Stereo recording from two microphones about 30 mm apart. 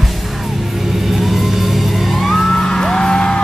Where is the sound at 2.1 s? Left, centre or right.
Centre.